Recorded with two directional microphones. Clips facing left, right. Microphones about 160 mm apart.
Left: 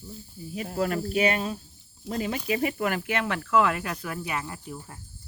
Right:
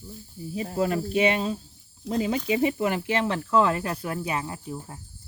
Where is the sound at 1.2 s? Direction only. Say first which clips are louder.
Right 2 dB; 25° right (ahead or behind).